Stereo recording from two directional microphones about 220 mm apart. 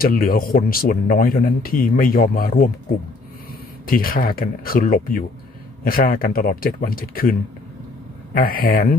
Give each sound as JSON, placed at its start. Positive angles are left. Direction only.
{"t": 0.0, "sound": "speech", "side_deg": 40}
{"t": 3.8, "sound": "speech", "side_deg": 40}